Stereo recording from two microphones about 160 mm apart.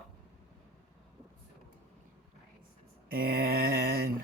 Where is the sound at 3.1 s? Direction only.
65° right (ahead or behind).